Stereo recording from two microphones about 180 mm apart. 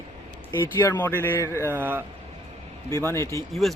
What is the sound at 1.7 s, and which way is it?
Speech, 10° right (ahead or behind).